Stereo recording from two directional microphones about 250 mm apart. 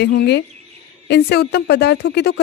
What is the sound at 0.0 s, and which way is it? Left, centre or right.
Speech, left.